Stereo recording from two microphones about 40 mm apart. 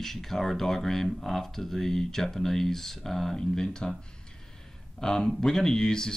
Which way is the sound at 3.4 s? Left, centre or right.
Centre.